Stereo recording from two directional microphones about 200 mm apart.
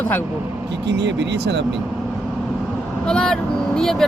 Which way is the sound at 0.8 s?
60° right (ahead or behind).